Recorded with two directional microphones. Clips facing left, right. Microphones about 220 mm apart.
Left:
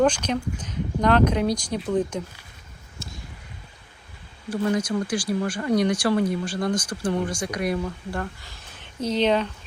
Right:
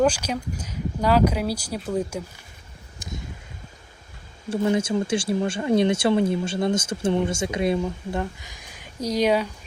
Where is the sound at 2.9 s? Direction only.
15° right (ahead or behind).